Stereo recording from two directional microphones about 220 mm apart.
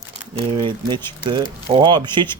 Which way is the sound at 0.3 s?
20° right (ahead or behind).